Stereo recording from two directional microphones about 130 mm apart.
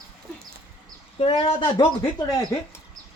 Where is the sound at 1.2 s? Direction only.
40° left (ahead or behind).